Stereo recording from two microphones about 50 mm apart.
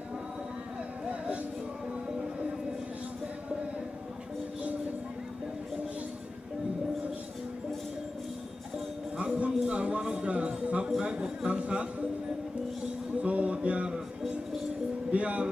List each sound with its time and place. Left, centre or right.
9.1 s music: right
13.2 s a sound: right
15.0 s music: right